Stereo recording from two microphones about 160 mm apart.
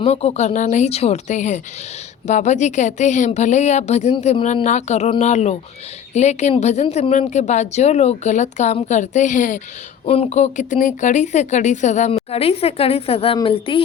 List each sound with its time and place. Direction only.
0.0 s speech: 40° left (ahead or behind)
10.1 s speech: 40° left (ahead or behind)